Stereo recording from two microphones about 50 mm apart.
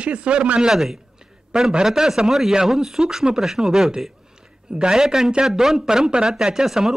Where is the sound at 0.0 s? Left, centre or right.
Right.